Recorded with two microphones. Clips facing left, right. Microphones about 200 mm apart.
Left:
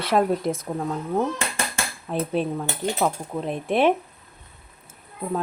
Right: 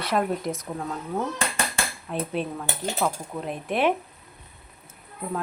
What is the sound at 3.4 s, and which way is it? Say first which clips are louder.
Speech: left 4 dB; 30° left (ahead or behind).